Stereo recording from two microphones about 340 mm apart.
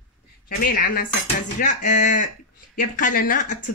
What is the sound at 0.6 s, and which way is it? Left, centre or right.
Speech, left.